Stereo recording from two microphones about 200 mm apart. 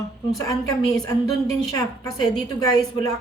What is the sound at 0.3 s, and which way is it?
Speech, 15° left (ahead or behind).